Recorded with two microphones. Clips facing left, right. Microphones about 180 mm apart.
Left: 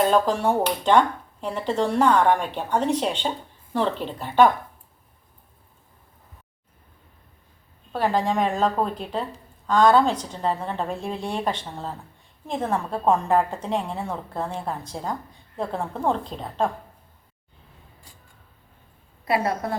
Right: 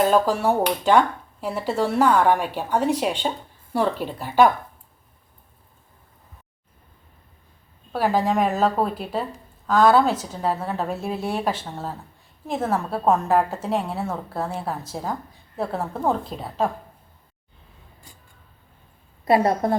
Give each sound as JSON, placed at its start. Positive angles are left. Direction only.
{"t": 0.0, "sound": "speech", "side_deg": -5}
{"t": 7.9, "sound": "a woman's voice", "side_deg": -5}
{"t": 19.2, "sound": "a woman's voice", "side_deg": -40}